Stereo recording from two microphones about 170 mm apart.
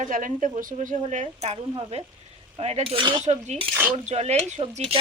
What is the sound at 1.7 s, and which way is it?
Cutlery, 35° right (ahead or behind).